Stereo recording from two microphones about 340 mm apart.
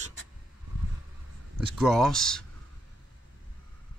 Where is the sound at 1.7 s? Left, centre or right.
Centre.